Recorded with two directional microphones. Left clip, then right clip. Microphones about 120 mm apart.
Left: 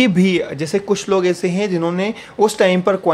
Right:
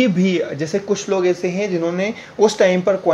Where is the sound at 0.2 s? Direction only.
20° left (ahead or behind); by 2.0 s 35° left (ahead or behind).